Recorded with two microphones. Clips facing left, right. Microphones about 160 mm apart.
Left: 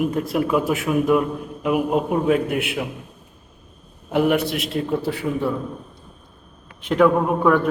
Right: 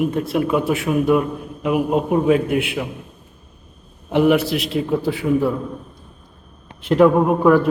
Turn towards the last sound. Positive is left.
turn(degrees=-5)  # may be behind; listen again after turning